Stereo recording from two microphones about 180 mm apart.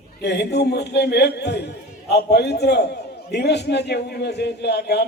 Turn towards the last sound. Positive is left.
turn(degrees=70)  # may be behind; listen again after turning